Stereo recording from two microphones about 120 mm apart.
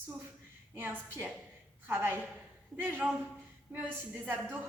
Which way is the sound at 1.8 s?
20° right (ahead or behind).